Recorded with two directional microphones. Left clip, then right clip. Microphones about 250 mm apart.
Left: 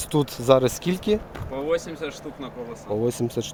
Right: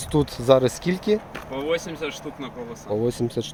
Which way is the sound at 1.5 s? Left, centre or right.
Right.